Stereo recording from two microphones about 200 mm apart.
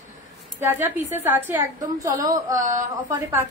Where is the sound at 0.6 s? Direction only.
10° right (ahead or behind).